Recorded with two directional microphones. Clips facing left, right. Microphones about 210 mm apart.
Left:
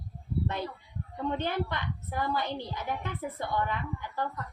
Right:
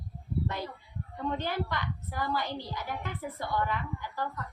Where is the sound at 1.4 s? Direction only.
20° left (ahead or behind).